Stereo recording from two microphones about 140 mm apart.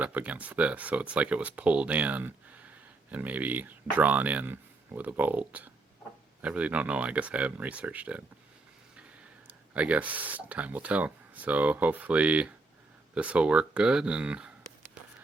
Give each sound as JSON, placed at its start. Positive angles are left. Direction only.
{"t": 0.0, "sound": "speech", "side_deg": -10}
{"t": 9.5, "sound": "speech", "side_deg": -10}